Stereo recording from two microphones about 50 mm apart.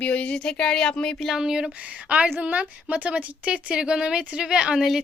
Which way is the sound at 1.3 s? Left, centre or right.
Centre.